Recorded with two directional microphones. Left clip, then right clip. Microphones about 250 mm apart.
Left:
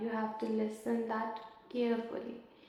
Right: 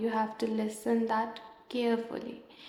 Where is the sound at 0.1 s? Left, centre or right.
Right.